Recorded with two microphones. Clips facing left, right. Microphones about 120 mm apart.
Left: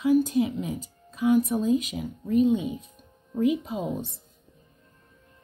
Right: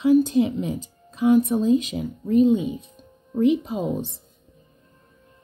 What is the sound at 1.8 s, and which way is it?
A woman's voice, 30° right (ahead or behind).